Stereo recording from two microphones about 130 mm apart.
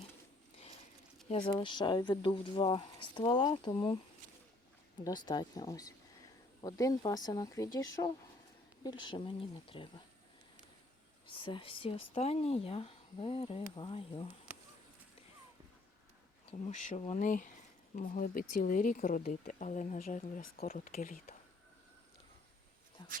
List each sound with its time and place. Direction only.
1.4 s speech: 40° left (ahead or behind)
5.0 s speech: 35° left (ahead or behind)
11.3 s speech: 40° left (ahead or behind)
16.5 s speech: 65° left (ahead or behind); by 21.2 s 90° left
23.0 s speech: 35° left (ahead or behind)